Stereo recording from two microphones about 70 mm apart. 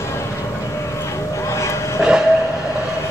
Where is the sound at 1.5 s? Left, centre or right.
Left.